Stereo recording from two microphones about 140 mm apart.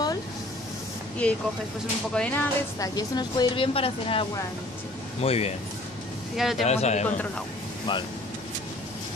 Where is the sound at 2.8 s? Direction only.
30° left (ahead or behind); by 5.5 s 45° left (ahead or behind).